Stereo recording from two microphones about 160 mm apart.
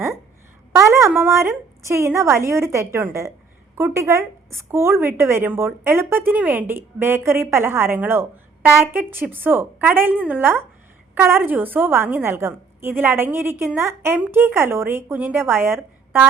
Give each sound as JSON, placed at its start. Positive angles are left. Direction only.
{"t": 0.7, "sound": "speech", "side_deg": -20}